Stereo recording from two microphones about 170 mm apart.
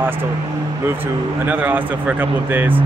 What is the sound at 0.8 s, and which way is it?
Speech, 10° right (ahead or behind).